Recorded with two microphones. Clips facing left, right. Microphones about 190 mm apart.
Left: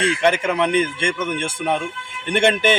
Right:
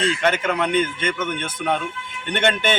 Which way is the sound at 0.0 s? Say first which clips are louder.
Left 2 dB; 10° left (ahead or behind).